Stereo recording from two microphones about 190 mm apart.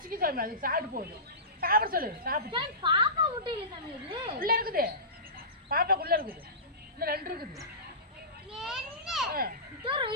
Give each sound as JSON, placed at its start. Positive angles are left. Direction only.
{"t": 0.1, "sound": "a woman's voice", "side_deg": -50}
{"t": 2.5, "sound": "a woman's voice", "side_deg": -25}
{"t": 4.4, "sound": "a woman's voice", "side_deg": -50}
{"t": 8.5, "sound": "a child's voice", "side_deg": 0}
{"t": 9.3, "sound": "a woman's voice", "side_deg": -50}
{"t": 9.8, "sound": "a woman's voice", "side_deg": -25}